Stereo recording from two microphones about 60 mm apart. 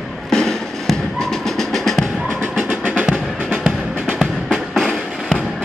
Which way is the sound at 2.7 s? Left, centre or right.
Right.